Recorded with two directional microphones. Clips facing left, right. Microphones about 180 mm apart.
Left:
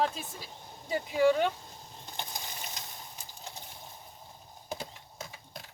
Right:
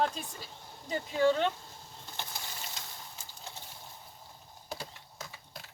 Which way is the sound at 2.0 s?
15° left (ahead or behind).